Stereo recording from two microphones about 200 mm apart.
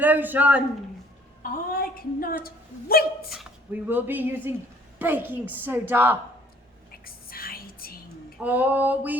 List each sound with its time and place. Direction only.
0.0 s speech: 10° right (ahead or behind)
1.4 s a woman's voice: 45° left (ahead or behind)
3.3 s speech: 10° right (ahead or behind)
7.0 s whispering: 45° left (ahead or behind)
8.4 s speech: 10° right (ahead or behind)